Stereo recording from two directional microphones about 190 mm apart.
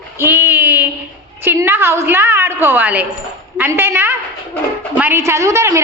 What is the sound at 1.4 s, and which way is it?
A woman's voice, 10° right (ahead or behind).